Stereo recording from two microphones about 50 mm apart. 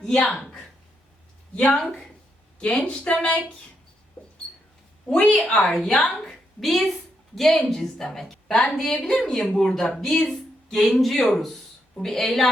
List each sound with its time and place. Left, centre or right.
0.0 s a woman's voice: centre
5.1 s a woman's voice: centre
5.7 s a woman's voice: centre